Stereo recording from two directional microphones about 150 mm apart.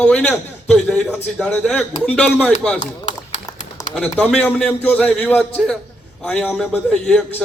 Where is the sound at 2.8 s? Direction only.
50° left (ahead or behind).